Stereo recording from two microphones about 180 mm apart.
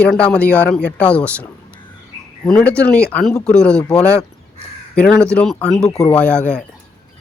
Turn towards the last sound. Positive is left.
turn(degrees=5)  # may be behind; listen again after turning